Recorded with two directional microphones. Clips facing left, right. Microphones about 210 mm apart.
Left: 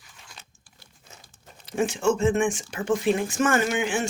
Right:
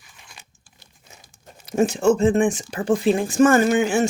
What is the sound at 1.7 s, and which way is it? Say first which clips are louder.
Speech: right 5 dB; 40° right (ahead or behind).